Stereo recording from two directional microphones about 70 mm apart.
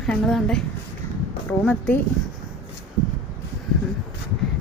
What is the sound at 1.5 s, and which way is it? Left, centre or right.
Speech, left.